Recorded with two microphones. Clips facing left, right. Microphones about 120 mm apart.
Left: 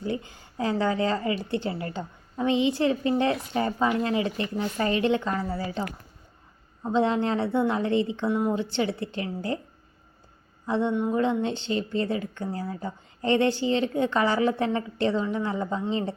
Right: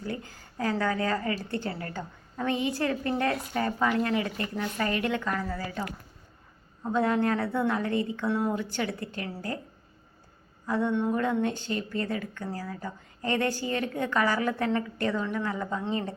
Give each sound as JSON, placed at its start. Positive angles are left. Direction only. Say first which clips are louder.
{"t": 0.0, "sound": "speech", "louder": "left 5 dB", "side_deg": 20}
{"t": 6.8, "sound": "speech", "louder": "left 2 dB", "side_deg": 20}
{"t": 10.7, "sound": "speech", "louder": "left 2 dB", "side_deg": 25}
{"t": 10.9, "sound": "speech", "louder": "left 2 dB", "side_deg": 15}